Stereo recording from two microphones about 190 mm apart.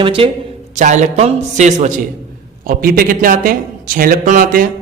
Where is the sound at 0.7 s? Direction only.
40° right (ahead or behind).